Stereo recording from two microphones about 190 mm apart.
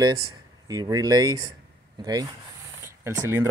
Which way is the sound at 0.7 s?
20° right (ahead or behind).